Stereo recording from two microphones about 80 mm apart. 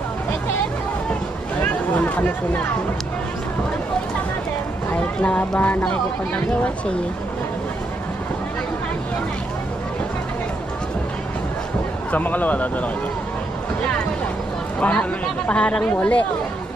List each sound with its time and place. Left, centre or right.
1.6 s a sound: centre
4.9 s speech: centre
12.1 s speech: left
14.8 s speech: centre